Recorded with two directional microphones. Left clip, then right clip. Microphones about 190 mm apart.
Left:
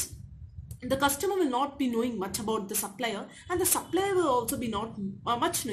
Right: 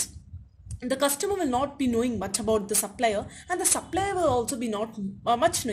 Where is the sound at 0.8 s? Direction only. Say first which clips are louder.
Right 1 dB; 45° right (ahead or behind).